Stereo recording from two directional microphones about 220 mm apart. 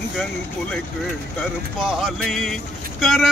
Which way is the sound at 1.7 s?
Centre (ahead or behind).